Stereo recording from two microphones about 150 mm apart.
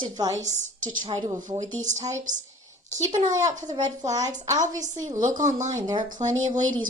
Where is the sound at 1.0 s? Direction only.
30° right (ahead or behind).